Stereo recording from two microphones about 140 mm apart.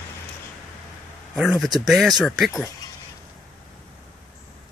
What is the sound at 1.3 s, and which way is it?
Speech, centre (ahead or behind).